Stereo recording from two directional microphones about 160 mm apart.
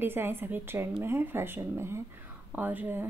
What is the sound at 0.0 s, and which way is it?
Speech, 15° right (ahead or behind).